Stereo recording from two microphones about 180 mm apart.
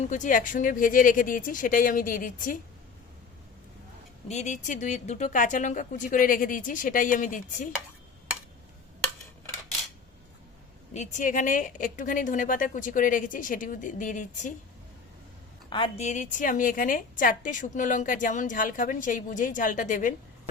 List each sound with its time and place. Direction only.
0.0 s a woman's voice: 45° left (ahead or behind)
4.3 s a woman's voice: 40° left (ahead or behind)
10.9 s a woman's voice: 40° left (ahead or behind)
15.7 s speech: 30° left (ahead or behind)
16.0 s a woman's voice: 45° left (ahead or behind)